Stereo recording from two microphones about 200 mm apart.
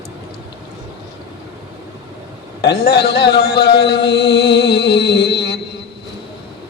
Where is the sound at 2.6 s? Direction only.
55° left (ahead or behind).